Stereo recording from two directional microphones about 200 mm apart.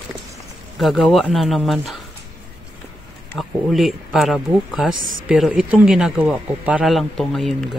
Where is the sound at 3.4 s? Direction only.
Centre (ahead or behind).